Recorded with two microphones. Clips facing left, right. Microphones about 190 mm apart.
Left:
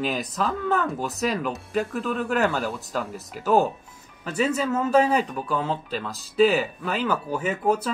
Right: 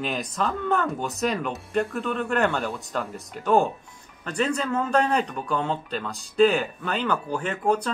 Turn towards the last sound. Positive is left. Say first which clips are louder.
# left 1 dB
turn(degrees=5)  # may be behind; listen again after turning